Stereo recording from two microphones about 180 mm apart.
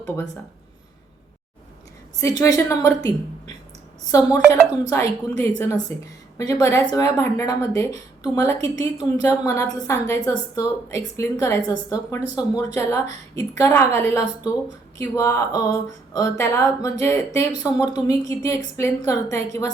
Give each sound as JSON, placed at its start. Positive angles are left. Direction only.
{"t": 2.2, "sound": "a woman's voice", "side_deg": 20}